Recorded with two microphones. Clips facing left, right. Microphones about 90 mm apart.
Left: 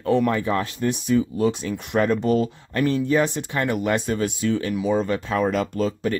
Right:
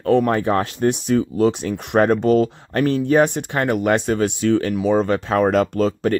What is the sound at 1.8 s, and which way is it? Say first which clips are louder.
Speech: right 6 dB; 60° right (ahead or behind).